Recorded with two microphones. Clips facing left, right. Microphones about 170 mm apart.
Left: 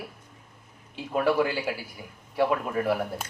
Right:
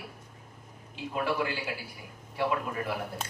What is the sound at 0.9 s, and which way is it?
A man's voice, 50° left (ahead or behind).